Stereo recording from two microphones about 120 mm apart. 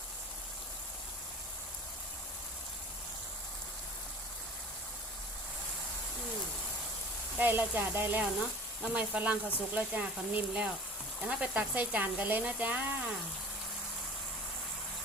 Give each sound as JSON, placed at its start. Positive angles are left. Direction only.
{"t": 7.3, "sound": "speech", "side_deg": -15}